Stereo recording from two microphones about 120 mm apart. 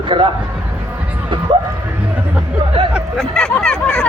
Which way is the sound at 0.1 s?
45° right (ahead or behind).